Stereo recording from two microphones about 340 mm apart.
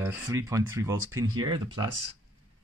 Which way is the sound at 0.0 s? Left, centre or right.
Centre.